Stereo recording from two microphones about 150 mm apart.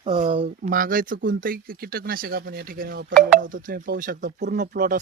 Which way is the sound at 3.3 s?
65° right (ahead or behind).